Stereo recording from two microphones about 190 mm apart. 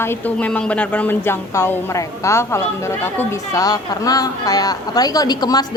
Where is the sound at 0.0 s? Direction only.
10° left (ahead or behind).